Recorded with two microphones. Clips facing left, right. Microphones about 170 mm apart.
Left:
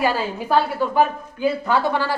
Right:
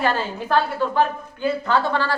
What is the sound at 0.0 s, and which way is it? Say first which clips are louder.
A woman's voice: left 1 dB; 5° left (ahead or behind).